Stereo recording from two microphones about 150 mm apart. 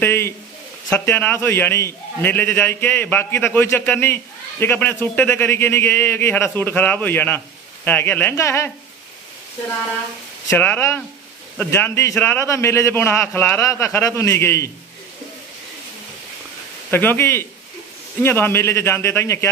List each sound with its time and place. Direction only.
0.0 s a man's voice: 15° left (ahead or behind)
10.5 s a man's voice: 10° left (ahead or behind)
16.9 s a man's voice: 15° left (ahead or behind)